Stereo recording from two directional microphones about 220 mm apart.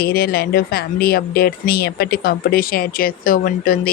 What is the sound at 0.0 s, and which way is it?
Speech, 45° left (ahead or behind).